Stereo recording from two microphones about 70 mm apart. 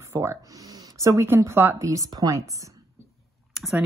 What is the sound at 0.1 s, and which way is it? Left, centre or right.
Speech, right.